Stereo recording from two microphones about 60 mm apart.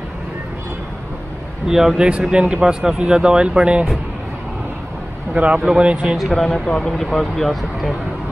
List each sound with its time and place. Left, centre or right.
1.7 s speech: centre
2.0 s speech: centre
5.3 s speech: right
6.1 s speech: centre